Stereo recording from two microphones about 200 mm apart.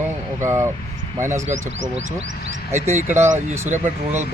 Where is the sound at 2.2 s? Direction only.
70° right (ahead or behind).